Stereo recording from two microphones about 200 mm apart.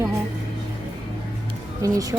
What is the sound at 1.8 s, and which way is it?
Speech, 15° right (ahead or behind).